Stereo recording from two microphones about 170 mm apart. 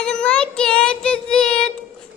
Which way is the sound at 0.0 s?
5° left (ahead or behind).